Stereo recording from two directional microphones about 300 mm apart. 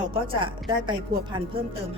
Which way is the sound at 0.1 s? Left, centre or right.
Centre.